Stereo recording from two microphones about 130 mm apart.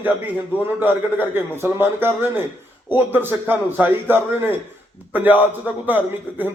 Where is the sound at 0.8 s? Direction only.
15° right (ahead or behind).